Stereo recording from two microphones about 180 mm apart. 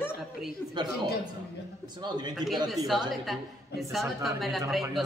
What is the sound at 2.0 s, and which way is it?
Speech, 25° right (ahead or behind).